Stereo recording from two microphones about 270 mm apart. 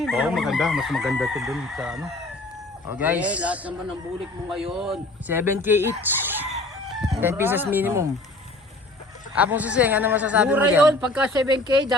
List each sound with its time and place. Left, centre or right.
0.0 s chicken: centre
6.0 s speech: centre
9.3 s chicken: centre
11.4 s speech: centre